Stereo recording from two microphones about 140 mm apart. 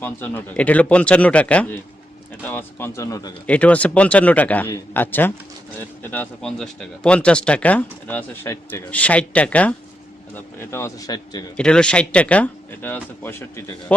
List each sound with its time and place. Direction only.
0.0 s speech: 15° left (ahead or behind)
3.4 s speech: 10° left (ahead or behind); by 11.4 s 30° left (ahead or behind)
11.5 s speech: 5° left (ahead or behind)